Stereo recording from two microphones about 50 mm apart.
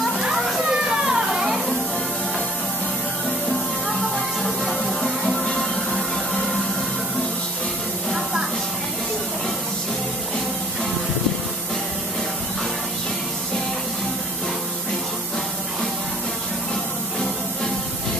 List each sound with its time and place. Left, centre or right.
0.7 s children playing: centre
4.4 s music: centre
8.1 s music: centre